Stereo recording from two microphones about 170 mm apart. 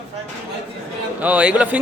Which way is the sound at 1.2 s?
10° right (ahead or behind).